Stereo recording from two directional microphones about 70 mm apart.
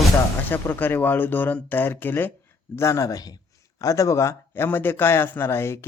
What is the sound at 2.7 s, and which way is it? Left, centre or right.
Speech, left.